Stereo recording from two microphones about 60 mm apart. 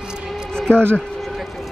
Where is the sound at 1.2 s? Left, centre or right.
Centre.